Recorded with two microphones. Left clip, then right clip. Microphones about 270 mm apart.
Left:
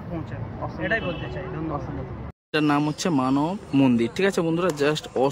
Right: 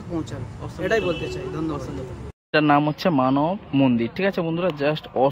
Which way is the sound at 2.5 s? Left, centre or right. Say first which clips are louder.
Right 4 dB; centre.